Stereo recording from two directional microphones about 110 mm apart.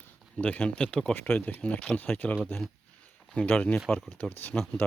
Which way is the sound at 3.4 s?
10° left (ahead or behind).